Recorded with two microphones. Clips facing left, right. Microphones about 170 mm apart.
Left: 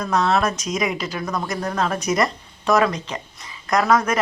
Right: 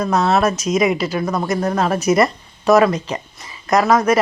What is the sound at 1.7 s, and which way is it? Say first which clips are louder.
Speech: right 5 dB; 10° right (ahead or behind).